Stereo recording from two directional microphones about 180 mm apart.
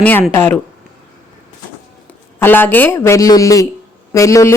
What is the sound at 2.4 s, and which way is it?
A woman's voice, 10° left (ahead or behind).